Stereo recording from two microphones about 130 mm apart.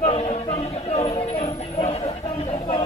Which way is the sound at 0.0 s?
50° left (ahead or behind).